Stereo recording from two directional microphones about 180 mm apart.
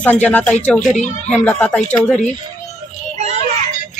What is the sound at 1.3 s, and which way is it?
Speech, 10° left (ahead or behind).